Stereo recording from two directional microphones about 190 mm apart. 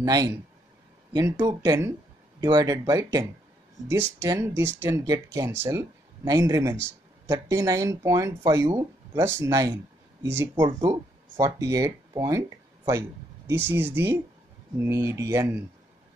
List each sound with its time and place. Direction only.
0.0 s speech: 20° right (ahead or behind)
10.9 s speech: 15° right (ahead or behind)